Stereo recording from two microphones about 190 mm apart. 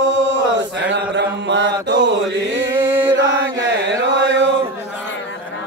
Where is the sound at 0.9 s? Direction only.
70° right (ahead or behind).